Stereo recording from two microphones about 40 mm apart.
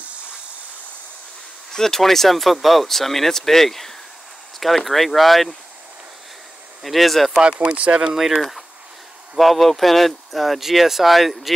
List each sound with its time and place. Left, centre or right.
1.7 s speech: centre
6.8 s speech: centre
7.4 s speech: right
8.1 s speech: centre
8.4 s speech: centre